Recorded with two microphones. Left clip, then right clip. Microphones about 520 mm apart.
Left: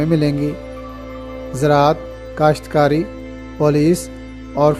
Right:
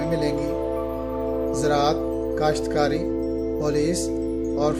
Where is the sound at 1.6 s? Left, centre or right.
Centre.